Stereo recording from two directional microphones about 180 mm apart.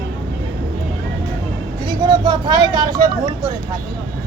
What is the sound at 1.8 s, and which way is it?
Vehicle, 25° right (ahead or behind).